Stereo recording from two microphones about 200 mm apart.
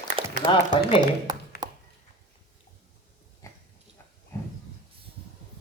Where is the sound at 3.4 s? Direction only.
15° left (ahead or behind).